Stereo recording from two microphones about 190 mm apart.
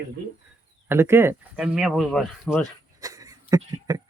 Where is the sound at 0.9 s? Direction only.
15° right (ahead or behind).